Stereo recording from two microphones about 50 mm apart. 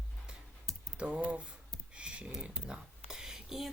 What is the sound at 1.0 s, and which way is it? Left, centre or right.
Speech, right.